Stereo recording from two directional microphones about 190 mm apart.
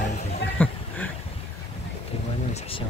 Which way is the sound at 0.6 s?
10° left (ahead or behind).